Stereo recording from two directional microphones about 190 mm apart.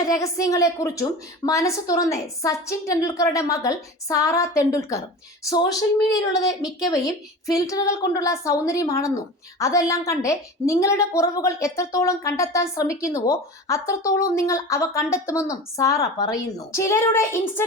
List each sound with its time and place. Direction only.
0.0 s a woman's voice: 15° left (ahead or behind)